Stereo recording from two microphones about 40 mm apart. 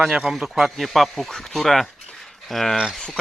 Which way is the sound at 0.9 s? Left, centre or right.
Centre.